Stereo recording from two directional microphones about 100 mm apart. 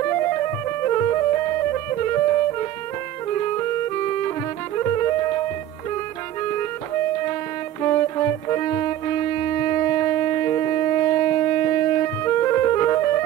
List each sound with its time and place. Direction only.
0.0 s music: 25° left (ahead or behind)
6.5 s music: 25° left (ahead or behind)